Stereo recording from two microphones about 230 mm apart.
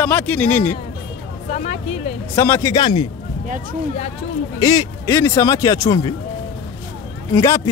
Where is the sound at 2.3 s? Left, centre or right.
Centre.